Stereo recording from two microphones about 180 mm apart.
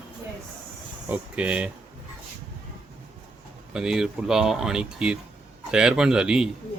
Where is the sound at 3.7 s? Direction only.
5° right (ahead or behind).